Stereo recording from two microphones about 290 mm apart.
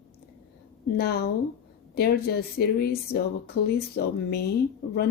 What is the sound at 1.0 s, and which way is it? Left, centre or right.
Speech, left.